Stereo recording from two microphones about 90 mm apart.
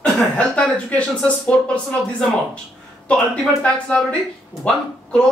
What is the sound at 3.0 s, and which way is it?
Speech, 15° left (ahead or behind).